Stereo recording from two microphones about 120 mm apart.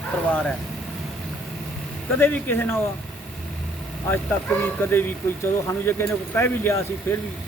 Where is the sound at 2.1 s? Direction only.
15° left (ahead or behind).